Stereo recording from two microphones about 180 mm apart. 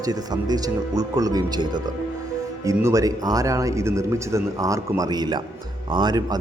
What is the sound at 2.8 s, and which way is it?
A man's voice, 20° right (ahead or behind).